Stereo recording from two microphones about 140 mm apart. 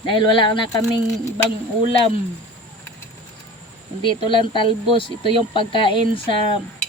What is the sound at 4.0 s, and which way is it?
Speech, 35° left (ahead or behind).